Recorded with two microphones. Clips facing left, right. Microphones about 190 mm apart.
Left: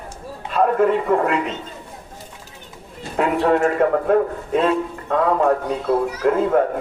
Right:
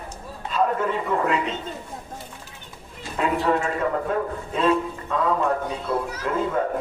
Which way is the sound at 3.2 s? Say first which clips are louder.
Left 5 dB; 60° left (ahead or behind).